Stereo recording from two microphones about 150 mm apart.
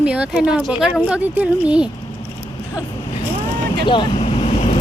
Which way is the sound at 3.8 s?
35° left (ahead or behind).